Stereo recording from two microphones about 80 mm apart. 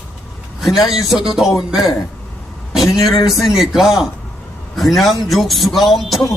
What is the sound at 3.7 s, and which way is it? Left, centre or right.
Speech, centre.